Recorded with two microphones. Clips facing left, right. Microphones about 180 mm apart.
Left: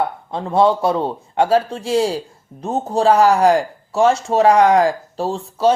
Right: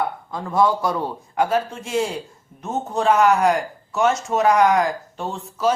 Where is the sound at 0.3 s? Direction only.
25° left (ahead or behind).